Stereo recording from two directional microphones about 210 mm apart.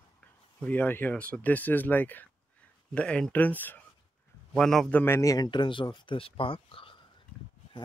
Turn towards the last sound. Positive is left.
turn(degrees=25)  # may be behind; listen again after turning